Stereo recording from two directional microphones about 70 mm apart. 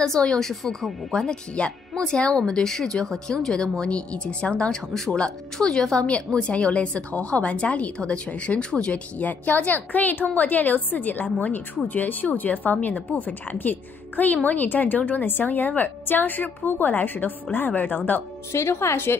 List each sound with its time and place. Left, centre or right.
0.0 s speech: centre; by 18.2 s left
18.5 s speech: left